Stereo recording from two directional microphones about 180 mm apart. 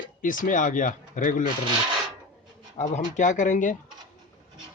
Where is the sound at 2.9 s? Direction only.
45° left (ahead or behind).